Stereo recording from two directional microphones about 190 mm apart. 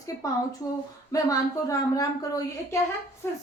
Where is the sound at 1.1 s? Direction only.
20° left (ahead or behind).